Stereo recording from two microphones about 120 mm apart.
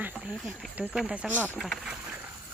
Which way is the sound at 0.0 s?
15° right (ahead or behind).